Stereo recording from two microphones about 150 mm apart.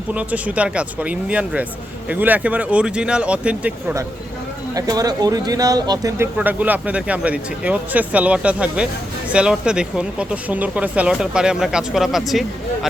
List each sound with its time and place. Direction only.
0.1 s speech: 10° right (ahead or behind)
4.7 s speech: 25° right (ahead or behind)
6.3 s speech: 10° right (ahead or behind)